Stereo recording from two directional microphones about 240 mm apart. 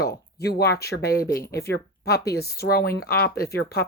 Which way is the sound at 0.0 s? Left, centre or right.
Left.